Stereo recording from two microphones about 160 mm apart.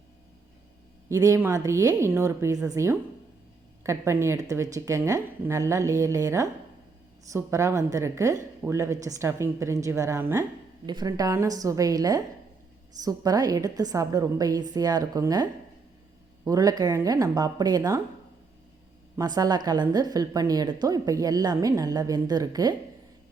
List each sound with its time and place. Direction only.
1.1 s a woman's voice: 20° right (ahead or behind)
19.1 s a woman's voice: 25° right (ahead or behind)